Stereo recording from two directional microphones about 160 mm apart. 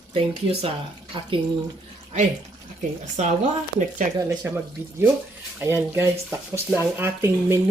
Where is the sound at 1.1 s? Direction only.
30° right (ahead or behind).